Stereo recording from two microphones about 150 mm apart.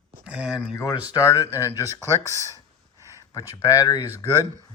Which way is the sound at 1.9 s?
20° right (ahead or behind).